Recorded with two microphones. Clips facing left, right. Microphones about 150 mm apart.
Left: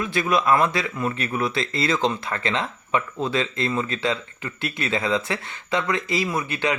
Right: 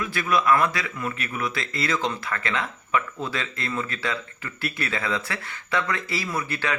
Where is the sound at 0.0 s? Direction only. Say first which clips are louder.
Left 2 dB; 25° left (ahead or behind).